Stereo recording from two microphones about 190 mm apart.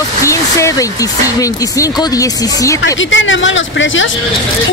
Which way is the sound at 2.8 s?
85° left.